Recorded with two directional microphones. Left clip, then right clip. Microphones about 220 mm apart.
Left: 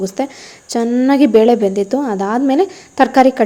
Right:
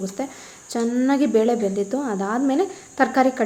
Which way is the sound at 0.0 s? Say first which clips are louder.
Left 9 dB; 35° left (ahead or behind).